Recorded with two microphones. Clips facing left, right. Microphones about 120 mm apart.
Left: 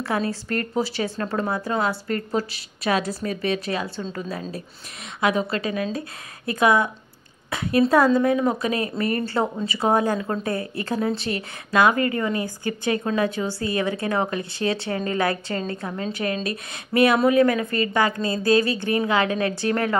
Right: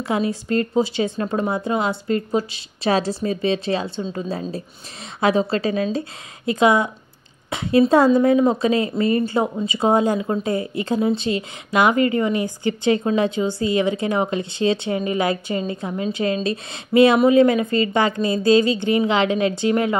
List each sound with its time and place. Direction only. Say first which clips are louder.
0.0 s a woman's voice: right 3 dB; 15° right (ahead or behind)
7.4 s a sound: right 4 dB; 25° right (ahead or behind)
7.9 s a woman's voice: right 3 dB; 25° right (ahead or behind)